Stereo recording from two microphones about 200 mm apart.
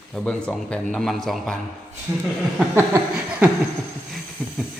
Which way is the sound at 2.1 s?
15° right (ahead or behind).